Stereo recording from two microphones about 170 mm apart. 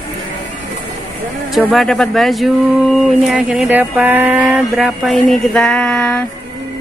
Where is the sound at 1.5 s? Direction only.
Centre (ahead or behind).